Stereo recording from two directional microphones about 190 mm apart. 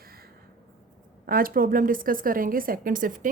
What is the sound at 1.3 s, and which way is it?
A woman's voice, 50° right (ahead or behind).